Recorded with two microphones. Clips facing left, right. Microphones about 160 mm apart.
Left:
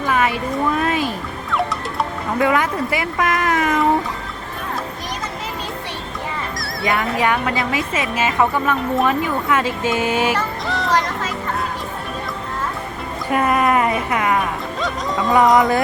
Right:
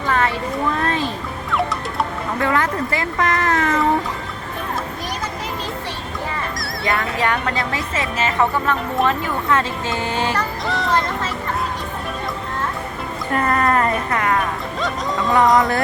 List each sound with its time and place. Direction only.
0.0 s boat: 15° left (ahead or behind)
0.8 s speech: 10° left (ahead or behind)
2.4 s a woman's voice: 15° left (ahead or behind)
7.2 s a woman's voice: 15° left (ahead or behind)
10.7 s vehicle: centre (ahead or behind)
13.3 s a woman's voice: 10° left (ahead or behind)
14.8 s speech: centre (ahead or behind)